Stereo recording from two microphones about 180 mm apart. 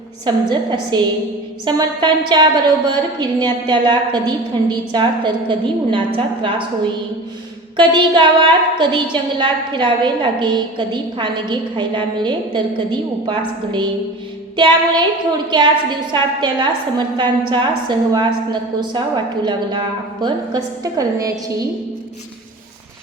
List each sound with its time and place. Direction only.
0.3 s a woman's voice: 25° right (ahead or behind)
7.8 s a woman's voice: 25° right (ahead or behind)
14.5 s a woman's voice: 25° right (ahead or behind)